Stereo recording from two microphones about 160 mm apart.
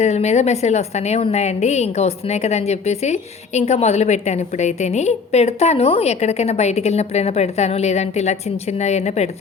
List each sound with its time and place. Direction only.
0.0 s a woman's voice: 45° left (ahead or behind)